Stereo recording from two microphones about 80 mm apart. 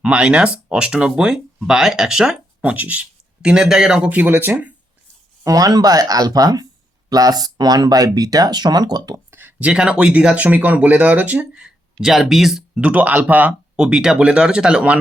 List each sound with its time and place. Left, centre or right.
0.0 s speech: centre
5.4 s speech: right
9.3 s speech: right; by 12.8 s centre
12.8 s speech: centre